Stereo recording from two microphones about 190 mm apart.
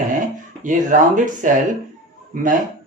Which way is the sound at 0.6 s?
45° right (ahead or behind).